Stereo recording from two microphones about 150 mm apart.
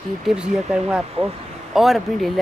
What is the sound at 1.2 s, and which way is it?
Speech, 40° right (ahead or behind).